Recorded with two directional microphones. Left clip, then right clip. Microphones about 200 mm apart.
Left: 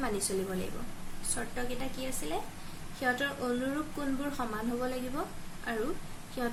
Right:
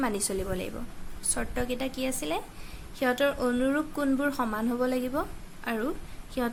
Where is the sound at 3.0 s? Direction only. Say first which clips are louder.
Right 6 dB; 55° right (ahead or behind).